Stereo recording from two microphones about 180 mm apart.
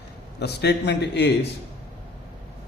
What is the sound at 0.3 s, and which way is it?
A man's voice, 65° left (ahead or behind).